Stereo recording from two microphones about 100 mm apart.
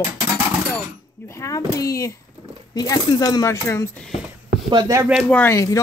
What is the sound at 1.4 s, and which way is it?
Speech, 35° left (ahead or behind).